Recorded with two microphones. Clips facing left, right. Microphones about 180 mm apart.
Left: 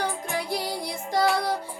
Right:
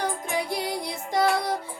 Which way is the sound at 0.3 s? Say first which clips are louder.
Right 1 dB; 20° right (ahead or behind).